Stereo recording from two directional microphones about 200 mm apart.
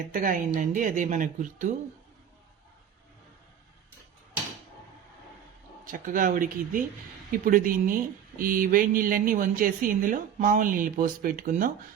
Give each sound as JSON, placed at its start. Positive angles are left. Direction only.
{"t": 0.1, "sound": "speech", "side_deg": -40}
{"t": 5.8, "sound": "a woman's voice", "side_deg": -40}